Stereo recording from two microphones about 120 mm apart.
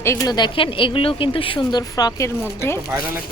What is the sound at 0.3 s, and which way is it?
A woman's voice, 45° left (ahead or behind).